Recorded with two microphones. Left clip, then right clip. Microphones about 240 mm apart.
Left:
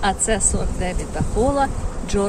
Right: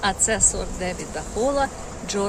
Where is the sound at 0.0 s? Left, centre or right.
Centre.